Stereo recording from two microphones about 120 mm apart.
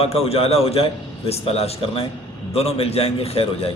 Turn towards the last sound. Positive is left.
turn(degrees=55)  # may be behind; listen again after turning